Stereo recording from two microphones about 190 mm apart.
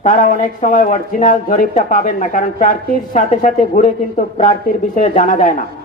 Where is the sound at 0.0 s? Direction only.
45° left (ahead or behind).